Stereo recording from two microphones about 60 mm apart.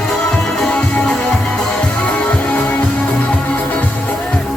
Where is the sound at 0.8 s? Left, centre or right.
Centre.